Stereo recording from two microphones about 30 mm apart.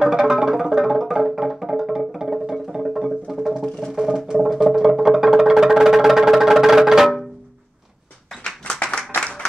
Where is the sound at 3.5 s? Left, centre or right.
Right.